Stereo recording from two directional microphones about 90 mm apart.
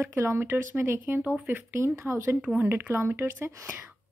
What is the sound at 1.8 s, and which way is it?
A woman's voice, 30° right (ahead or behind).